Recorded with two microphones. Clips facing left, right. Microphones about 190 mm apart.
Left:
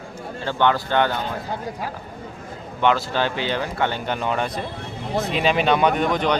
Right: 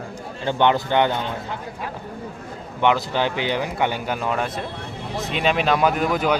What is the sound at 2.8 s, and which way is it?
Speech, 15° right (ahead or behind).